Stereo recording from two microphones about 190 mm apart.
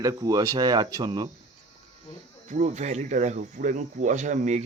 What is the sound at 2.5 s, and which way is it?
Speech, 40° right (ahead or behind).